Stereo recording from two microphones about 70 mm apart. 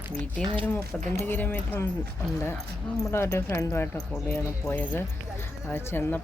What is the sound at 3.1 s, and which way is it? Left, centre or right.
Speech, left.